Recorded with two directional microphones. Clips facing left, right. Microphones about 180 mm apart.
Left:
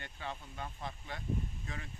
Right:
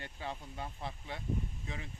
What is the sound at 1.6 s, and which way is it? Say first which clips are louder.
Speech: right 1 dB; 20° right (ahead or behind).